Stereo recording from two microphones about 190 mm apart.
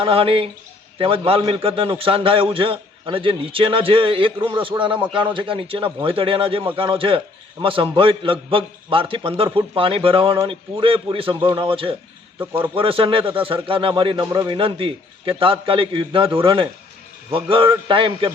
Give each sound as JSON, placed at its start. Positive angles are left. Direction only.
{"t": 0.0, "sound": "a man's voice", "side_deg": -30}